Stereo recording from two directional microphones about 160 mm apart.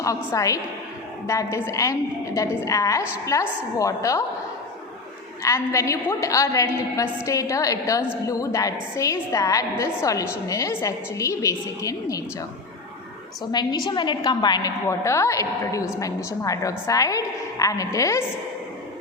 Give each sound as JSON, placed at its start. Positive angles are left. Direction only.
{"t": 0.3, "sound": "a woman's voice", "side_deg": 20}
{"t": 5.4, "sound": "a woman's voice", "side_deg": 20}
{"t": 13.5, "sound": "a woman's voice", "side_deg": 25}